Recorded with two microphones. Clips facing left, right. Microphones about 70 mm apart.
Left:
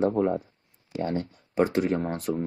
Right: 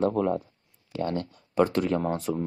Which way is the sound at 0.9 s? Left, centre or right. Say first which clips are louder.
Even; centre.